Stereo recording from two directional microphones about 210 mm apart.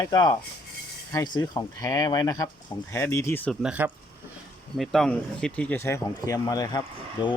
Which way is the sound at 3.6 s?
5° right (ahead or behind).